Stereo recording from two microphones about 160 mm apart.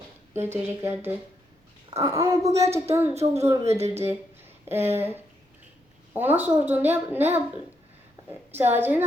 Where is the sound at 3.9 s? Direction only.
15° right (ahead or behind).